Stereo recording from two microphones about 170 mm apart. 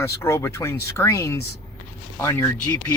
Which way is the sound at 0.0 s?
15° left (ahead or behind).